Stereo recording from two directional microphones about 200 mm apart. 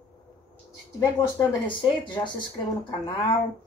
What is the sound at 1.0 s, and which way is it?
Speech, 15° left (ahead or behind).